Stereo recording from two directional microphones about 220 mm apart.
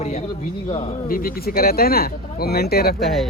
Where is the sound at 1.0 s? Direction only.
40° left (ahead or behind).